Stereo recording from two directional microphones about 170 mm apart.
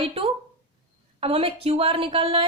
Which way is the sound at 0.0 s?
35° right (ahead or behind).